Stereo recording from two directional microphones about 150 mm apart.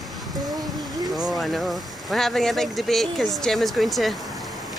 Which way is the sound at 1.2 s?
Centre (ahead or behind).